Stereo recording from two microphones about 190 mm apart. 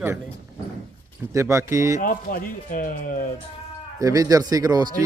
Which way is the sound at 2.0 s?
45° left (ahead or behind).